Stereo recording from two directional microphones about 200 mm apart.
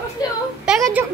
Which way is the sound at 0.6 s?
Centre (ahead or behind).